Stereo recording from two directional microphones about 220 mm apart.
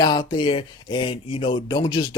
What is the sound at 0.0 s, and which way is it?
Speech, 15° left (ahead or behind).